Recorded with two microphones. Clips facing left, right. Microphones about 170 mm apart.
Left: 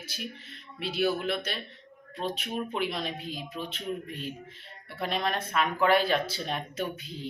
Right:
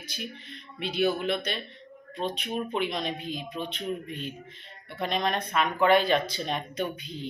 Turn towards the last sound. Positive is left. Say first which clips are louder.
# right 2 dB
turn(degrees=5)  # may be behind; listen again after turning